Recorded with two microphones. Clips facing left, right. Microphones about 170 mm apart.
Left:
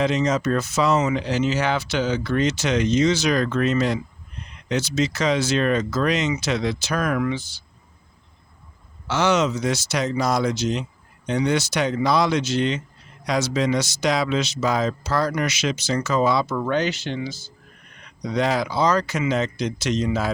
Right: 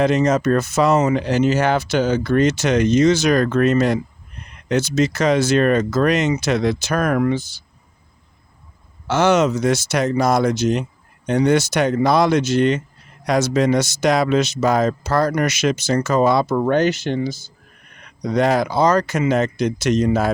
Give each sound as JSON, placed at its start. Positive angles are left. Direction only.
{"t": 0.0, "sound": "speech", "side_deg": -50}
{"t": 9.0, "sound": "speech", "side_deg": -50}